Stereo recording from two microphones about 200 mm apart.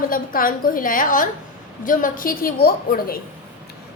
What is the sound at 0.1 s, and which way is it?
A woman's voice, 45° left (ahead or behind).